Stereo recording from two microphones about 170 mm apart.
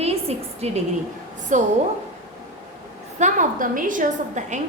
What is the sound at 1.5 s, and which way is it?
Speech, 45° right (ahead or behind).